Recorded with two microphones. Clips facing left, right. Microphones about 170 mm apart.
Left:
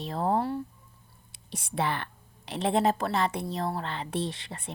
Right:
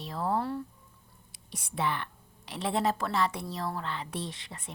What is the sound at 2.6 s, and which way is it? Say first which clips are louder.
A woman's voice: left 4 dB; 20° left (ahead or behind).